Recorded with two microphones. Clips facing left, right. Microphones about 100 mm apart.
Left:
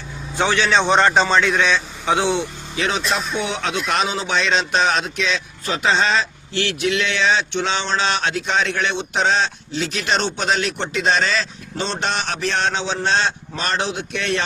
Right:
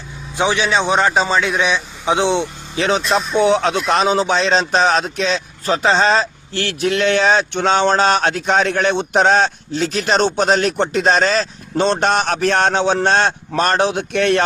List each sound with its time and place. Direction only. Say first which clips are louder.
0.3 s a man's voice: right 1 dB; 15° right (ahead or behind); by 14.4 s 50° right (ahead or behind)